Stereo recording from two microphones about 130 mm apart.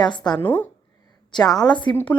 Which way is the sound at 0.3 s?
15° left (ahead or behind).